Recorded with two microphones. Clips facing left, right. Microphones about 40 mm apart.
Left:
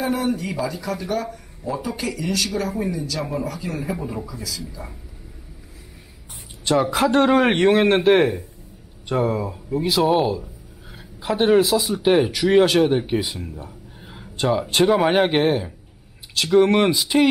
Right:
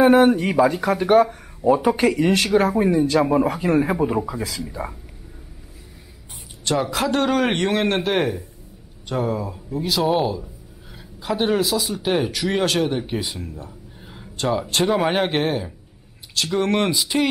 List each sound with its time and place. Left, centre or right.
0.0 s speech: right
6.6 s a man's voice: centre